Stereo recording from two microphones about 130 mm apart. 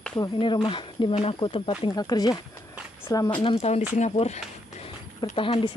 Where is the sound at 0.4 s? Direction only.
40° left (ahead or behind).